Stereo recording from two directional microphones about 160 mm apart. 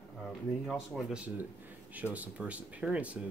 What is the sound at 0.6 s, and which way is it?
Speech, centre (ahead or behind).